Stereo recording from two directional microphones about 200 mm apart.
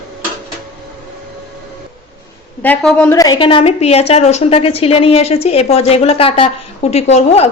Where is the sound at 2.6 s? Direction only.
5° left (ahead or behind).